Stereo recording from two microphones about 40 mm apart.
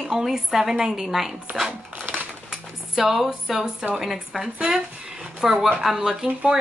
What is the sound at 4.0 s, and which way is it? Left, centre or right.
Speech, centre.